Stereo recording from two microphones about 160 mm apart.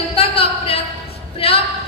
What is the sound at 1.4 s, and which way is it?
Music, 35° left (ahead or behind).